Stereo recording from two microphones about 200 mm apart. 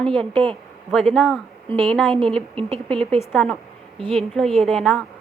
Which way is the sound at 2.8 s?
5° left (ahead or behind).